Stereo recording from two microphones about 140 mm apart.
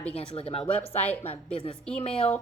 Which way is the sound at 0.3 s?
40° left (ahead or behind).